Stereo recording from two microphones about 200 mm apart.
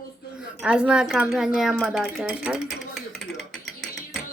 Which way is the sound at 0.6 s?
5° right (ahead or behind).